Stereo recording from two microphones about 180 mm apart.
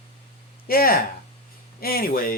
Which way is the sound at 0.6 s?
55° left (ahead or behind).